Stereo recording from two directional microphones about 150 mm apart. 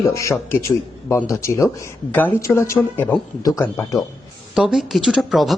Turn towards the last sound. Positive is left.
turn(degrees=0)  # may be behind; listen again after turning